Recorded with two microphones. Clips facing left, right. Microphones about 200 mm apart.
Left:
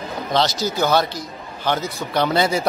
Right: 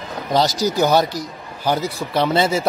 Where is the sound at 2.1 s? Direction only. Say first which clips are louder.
Right 1 dB; centre (ahead or behind).